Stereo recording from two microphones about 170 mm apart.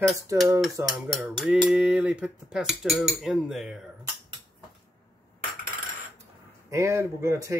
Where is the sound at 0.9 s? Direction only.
5° right (ahead or behind).